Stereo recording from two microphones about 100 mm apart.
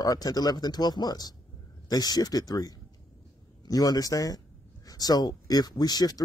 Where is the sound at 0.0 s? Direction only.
40° left (ahead or behind).